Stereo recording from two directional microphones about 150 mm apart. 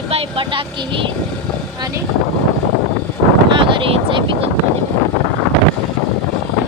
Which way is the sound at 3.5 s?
35° right (ahead or behind).